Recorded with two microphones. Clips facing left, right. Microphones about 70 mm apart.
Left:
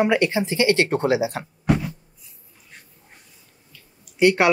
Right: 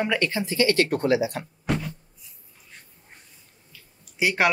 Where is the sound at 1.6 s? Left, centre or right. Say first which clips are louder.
Left 6 dB; centre.